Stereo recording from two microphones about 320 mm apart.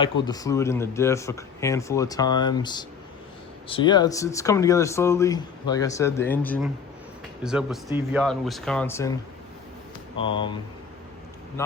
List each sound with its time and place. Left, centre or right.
0.0 s speech: centre
10.2 s speech: centre